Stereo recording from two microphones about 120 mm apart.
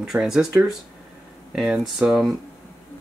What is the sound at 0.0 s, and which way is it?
Speech, 5° right (ahead or behind).